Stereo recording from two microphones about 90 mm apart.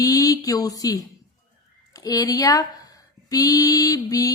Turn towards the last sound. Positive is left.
turn(degrees=40)  # may be behind; listen again after turning